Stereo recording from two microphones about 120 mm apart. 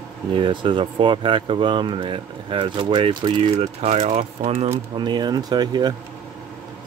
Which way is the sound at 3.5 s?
65° right (ahead or behind).